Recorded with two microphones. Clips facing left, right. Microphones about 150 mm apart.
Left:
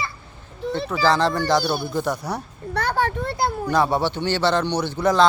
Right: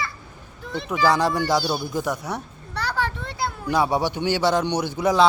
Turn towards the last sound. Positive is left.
turn(degrees=-10)  # may be behind; listen again after turning